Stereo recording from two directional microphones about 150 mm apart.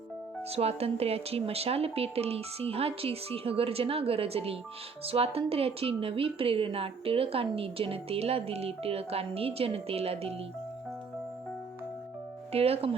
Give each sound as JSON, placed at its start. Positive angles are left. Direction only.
{"t": 0.5, "sound": "a woman's voice", "side_deg": -40}
{"t": 12.5, "sound": "a woman's voice", "side_deg": -40}